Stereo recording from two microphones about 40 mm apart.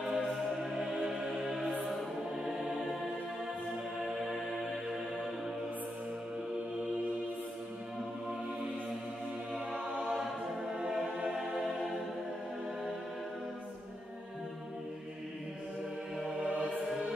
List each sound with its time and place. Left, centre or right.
0.0 s music: centre
2.3 s choir: centre
4.0 s music: centre
9.7 s music: right
10.0 s choir: centre
11.0 s music: centre